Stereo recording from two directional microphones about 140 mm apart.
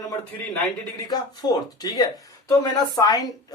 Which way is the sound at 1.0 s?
30° left (ahead or behind).